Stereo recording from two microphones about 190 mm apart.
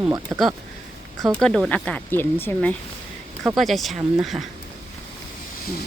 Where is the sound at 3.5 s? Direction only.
Centre (ahead or behind).